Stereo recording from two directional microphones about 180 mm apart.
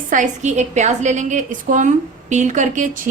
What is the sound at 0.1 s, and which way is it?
A woman's voice, 45° right (ahead or behind).